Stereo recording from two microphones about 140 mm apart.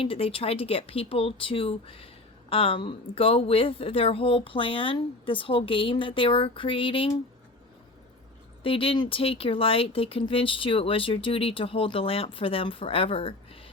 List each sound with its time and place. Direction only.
0.0 s speech: 40° left (ahead or behind)
8.6 s speech: 40° left (ahead or behind)